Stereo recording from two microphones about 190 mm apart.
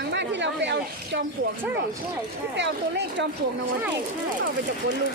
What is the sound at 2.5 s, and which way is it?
Speech, 65° right (ahead or behind).